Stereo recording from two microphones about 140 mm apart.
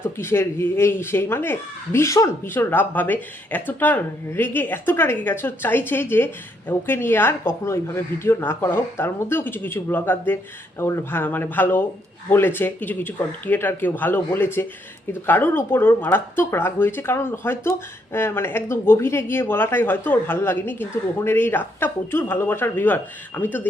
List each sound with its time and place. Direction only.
0.0 s speech: 15° left (ahead or behind)